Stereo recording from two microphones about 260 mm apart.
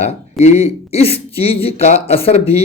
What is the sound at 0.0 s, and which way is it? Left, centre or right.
Speech, left.